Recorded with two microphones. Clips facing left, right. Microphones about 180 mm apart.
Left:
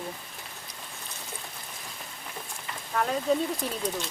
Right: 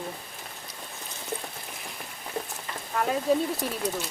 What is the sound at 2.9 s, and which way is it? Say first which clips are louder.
Speech: right 1 dB; 5° right (ahead or behind).